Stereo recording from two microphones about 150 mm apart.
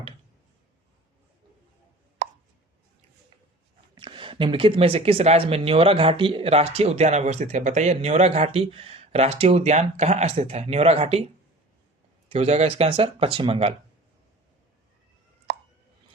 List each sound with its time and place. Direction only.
3.9 s speech: 35° right (ahead or behind)
12.3 s speech: 45° right (ahead or behind)